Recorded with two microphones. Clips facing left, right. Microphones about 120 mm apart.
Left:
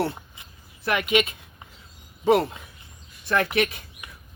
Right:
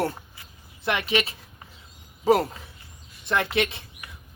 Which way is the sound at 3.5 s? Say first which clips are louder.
Left 1 dB; 25° right (ahead or behind).